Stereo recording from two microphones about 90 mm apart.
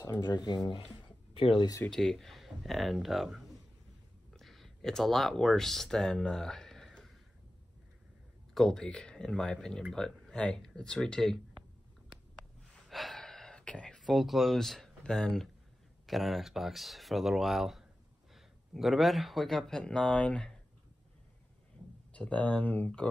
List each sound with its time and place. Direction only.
1.3 s speech: 85° left
1.9 s speech: 5° left (ahead or behind)
8.5 s speech: 5° left (ahead or behind)
12.8 s gasp: centre (ahead or behind)
16.1 s speech: centre (ahead or behind)
22.1 s speech: 15° left (ahead or behind)